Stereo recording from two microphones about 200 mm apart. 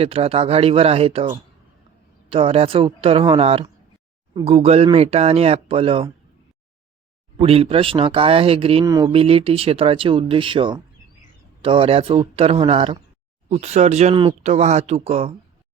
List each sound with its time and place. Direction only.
0.0 s speech: 30° right (ahead or behind)
2.3 s speech: 30° right (ahead or behind)
7.4 s speech: 30° right (ahead or behind)
8.8 s speech: 15° right (ahead or behind)
9.1 s speech: 30° right (ahead or behind)